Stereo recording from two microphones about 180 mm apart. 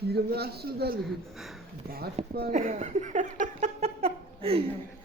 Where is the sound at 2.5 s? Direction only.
40° right (ahead or behind).